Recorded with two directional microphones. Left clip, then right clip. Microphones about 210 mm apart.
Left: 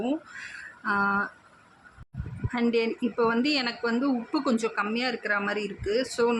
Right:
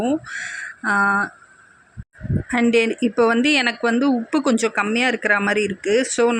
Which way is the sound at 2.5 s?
25° right (ahead or behind).